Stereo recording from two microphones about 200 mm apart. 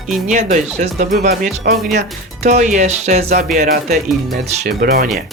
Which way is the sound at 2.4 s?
35° right (ahead or behind).